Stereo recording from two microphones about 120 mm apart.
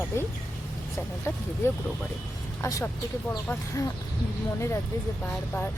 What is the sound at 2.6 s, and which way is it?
Speech, 25° left (ahead or behind).